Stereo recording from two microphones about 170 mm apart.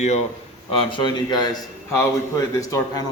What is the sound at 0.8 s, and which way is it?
Speech, 30° left (ahead or behind).